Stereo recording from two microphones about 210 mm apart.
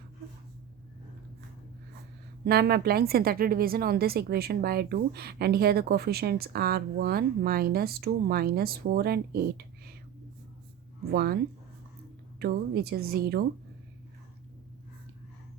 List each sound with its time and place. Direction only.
2.4 s a woman's voice: 50° right (ahead or behind)
11.1 s a woman's voice: 50° right (ahead or behind)
12.4 s a woman's voice: 50° right (ahead or behind)